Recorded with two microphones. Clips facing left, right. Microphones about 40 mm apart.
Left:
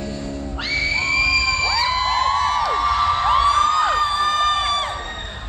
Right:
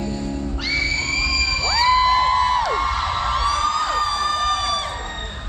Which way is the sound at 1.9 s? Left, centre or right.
Centre.